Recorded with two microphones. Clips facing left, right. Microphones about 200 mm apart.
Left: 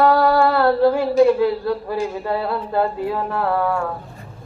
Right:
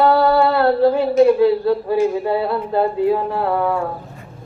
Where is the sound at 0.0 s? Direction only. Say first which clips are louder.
Right 1 dB; 20° right (ahead or behind).